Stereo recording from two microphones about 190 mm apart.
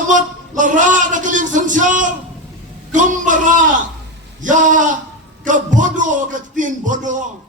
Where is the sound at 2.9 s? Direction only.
40° right (ahead or behind).